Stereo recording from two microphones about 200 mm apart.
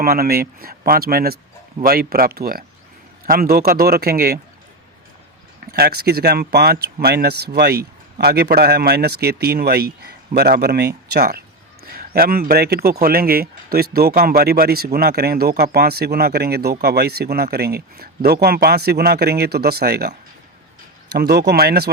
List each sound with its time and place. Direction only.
0.0 s speech: 50° right (ahead or behind)
5.7 s speech: 50° right (ahead or behind)